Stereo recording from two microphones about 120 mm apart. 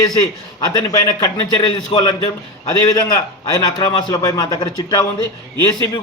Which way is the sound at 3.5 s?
30° left (ahead or behind).